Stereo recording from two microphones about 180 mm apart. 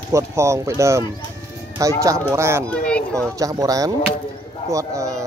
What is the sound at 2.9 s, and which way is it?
Speech, 5° left (ahead or behind).